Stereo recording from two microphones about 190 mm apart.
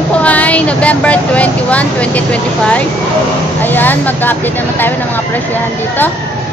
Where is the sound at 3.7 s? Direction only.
10° left (ahead or behind).